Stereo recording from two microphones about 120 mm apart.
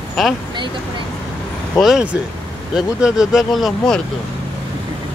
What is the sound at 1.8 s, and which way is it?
Speech, 5° right (ahead or behind).